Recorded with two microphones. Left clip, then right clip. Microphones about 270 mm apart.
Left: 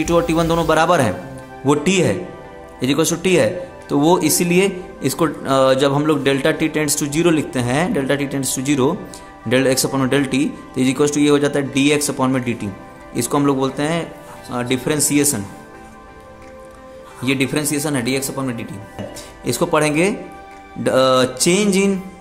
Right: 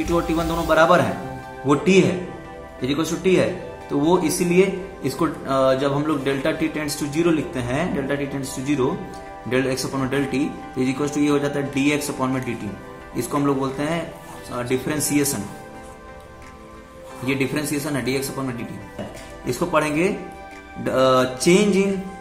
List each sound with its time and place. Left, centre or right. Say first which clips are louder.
0.0 s speech: left 5 dB; left
17.2 s speech: left 4 dB; left